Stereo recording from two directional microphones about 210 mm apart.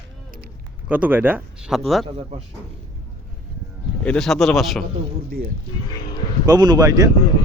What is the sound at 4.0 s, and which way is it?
Speech, 5° left (ahead or behind).